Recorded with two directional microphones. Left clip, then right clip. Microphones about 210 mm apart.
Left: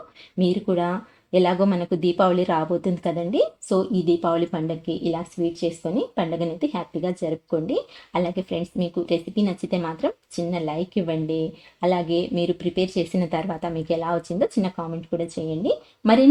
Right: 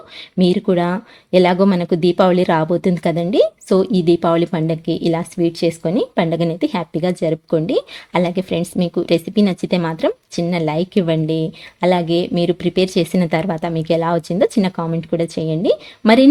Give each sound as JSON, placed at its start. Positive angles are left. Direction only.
{"t": 0.3, "sound": "speech", "side_deg": -35}